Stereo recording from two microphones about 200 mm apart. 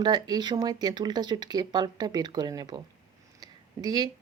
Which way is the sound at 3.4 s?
20° right (ahead or behind).